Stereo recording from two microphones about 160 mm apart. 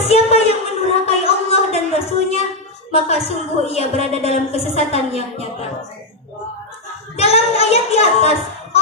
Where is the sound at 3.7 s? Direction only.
40° left (ahead or behind).